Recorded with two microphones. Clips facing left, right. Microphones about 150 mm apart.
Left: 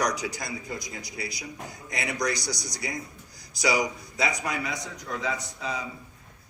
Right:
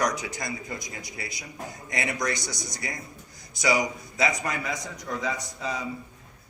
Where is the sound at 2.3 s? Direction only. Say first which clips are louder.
Left 1 dB; 25° right (ahead or behind).